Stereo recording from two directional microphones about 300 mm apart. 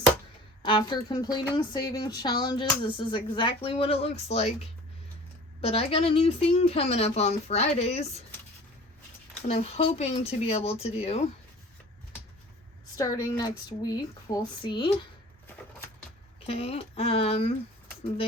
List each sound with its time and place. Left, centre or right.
0.6 s a woman's voice: centre
9.5 s speech: left
13.0 s a woman's voice: centre
16.5 s speech: centre